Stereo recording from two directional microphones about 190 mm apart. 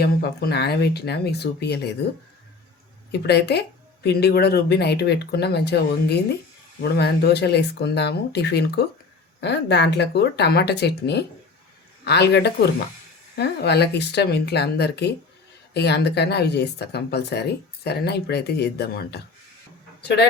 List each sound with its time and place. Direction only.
0.0 s speech: 55° left (ahead or behind)
3.1 s speech: 60° left (ahead or behind)